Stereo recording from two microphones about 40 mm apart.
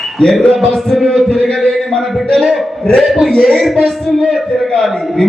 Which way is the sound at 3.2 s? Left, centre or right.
Centre.